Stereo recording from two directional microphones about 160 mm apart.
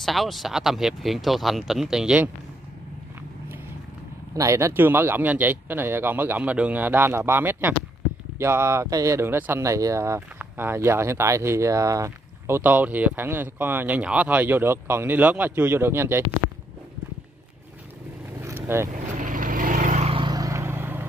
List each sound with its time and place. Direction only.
0.0 s speech: centre (ahead or behind)
4.3 s speech: 20° right (ahead or behind)
18.4 s vehicle: 15° right (ahead or behind)
19.1 s vehicle: 55° right (ahead or behind); by 21.0 s 15° right (ahead or behind)